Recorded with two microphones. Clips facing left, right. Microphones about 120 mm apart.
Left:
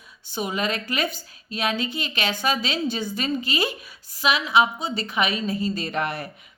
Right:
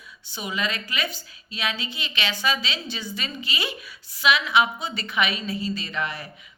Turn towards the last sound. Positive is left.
turn(degrees=55)  # may be behind; listen again after turning